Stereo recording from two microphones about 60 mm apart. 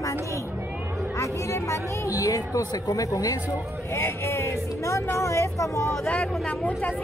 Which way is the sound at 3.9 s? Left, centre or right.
Left.